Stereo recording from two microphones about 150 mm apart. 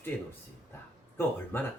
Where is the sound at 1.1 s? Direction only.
15° left (ahead or behind).